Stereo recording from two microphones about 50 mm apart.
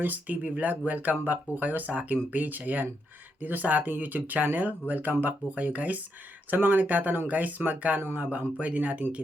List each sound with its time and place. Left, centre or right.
0.0 s speech: right